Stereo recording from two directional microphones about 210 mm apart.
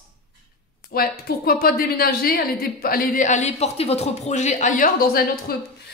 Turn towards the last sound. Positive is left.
turn(degrees=45)  # may be behind; listen again after turning